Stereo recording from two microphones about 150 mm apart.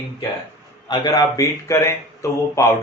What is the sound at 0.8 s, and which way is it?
Speech, 30° left (ahead or behind).